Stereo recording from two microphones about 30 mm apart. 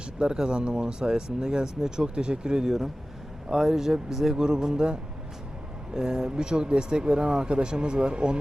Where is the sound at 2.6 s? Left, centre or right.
Centre.